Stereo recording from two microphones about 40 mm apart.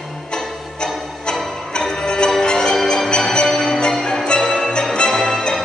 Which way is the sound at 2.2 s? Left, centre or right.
Centre.